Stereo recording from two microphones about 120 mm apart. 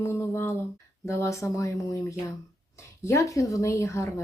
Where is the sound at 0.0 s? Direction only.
20° left (ahead or behind).